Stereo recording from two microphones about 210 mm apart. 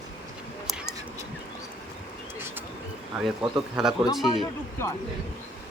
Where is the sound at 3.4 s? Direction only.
5° right (ahead or behind).